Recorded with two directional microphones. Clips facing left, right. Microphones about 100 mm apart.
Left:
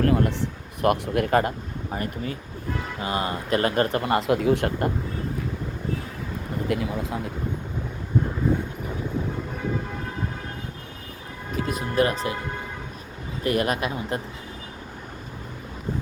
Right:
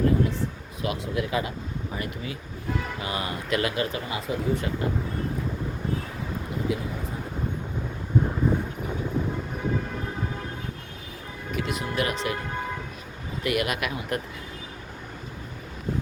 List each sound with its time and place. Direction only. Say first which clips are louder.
0.0 s a man's voice: left 2 dB; 70° left (ahead or behind); by 2.4 s 45° left (ahead or behind)
3.0 s speech: left 4 dB; 30° left (ahead or behind)
3.8 s speech: left 8 dB; 60° left (ahead or behind)
6.7 s speech: left 6 dB; 80° left
11.5 s speech: left 4 dB; 35° left (ahead or behind)
13.4 s speech: left 3 dB; 35° left (ahead or behind)